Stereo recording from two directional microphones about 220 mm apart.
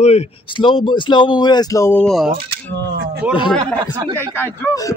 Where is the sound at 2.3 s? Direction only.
45° right (ahead or behind).